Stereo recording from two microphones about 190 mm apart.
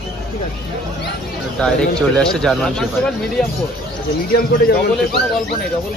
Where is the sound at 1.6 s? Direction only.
5° left (ahead or behind).